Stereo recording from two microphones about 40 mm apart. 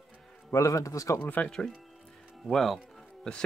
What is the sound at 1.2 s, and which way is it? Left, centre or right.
Speech, left.